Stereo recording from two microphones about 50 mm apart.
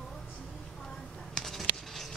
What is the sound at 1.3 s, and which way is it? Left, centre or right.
Writing, centre.